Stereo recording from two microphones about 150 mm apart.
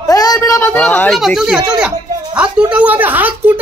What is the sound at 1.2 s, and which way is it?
Speech, 5° right (ahead or behind).